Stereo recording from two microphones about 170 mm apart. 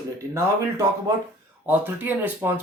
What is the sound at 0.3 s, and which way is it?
Speech, 15° right (ahead or behind).